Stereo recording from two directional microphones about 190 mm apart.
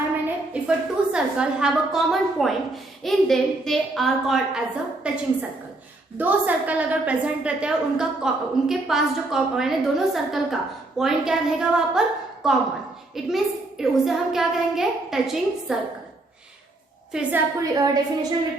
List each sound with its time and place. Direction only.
0.5 s a woman's voice: 5° right (ahead or behind)
17.1 s a woman's voice: 5° right (ahead or behind)
17.6 s a woman's voice: 20° right (ahead or behind)